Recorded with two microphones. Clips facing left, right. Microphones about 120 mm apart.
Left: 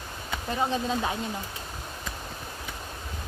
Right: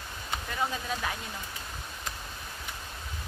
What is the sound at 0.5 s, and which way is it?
Speech, 25° left (ahead or behind).